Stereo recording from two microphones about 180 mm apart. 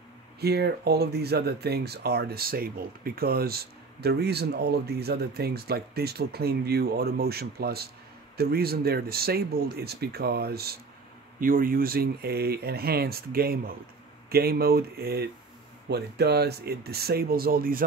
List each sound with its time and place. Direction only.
0.4 s speech: 60° right (ahead or behind)
11.3 s speech: 50° right (ahead or behind)